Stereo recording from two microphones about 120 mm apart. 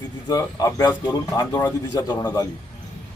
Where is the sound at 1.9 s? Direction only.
35° left (ahead or behind).